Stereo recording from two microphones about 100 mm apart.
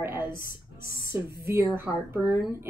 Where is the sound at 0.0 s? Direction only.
25° right (ahead or behind).